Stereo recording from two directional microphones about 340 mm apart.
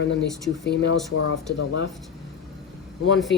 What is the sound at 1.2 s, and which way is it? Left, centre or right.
Speech, left.